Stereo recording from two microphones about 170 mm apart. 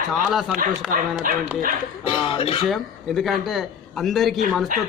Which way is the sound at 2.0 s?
30° left (ahead or behind).